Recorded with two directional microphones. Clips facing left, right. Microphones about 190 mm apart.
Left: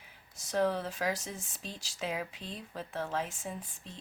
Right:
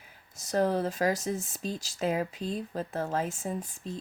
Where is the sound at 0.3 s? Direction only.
40° right (ahead or behind).